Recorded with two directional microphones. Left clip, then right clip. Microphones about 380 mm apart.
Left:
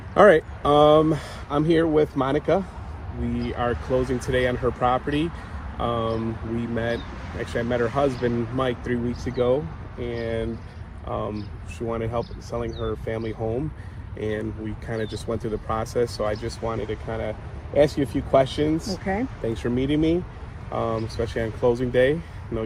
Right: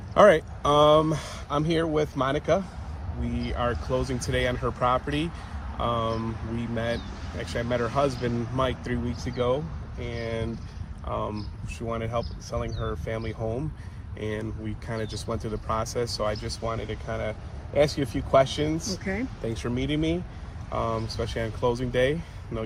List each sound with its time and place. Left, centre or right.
0.1 s speech: centre